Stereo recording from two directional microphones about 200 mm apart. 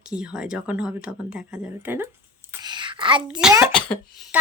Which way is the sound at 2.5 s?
20° right (ahead or behind).